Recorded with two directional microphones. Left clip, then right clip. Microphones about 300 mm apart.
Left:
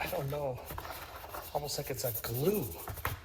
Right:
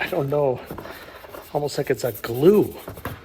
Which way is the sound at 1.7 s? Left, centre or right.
Right.